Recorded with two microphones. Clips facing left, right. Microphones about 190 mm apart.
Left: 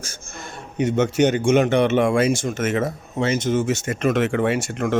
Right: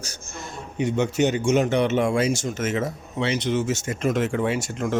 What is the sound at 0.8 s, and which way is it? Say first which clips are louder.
Speech: left 3 dB; 50° left (ahead or behind).